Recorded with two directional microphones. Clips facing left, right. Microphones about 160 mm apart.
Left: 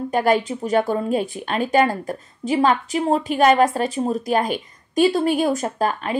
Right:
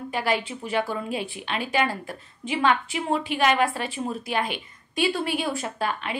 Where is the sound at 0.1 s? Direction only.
45° left (ahead or behind).